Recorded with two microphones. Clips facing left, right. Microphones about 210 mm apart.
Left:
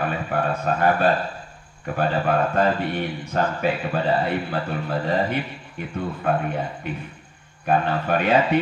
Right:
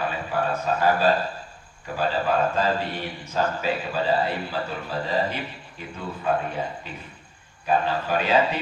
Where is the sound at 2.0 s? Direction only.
60° left (ahead or behind).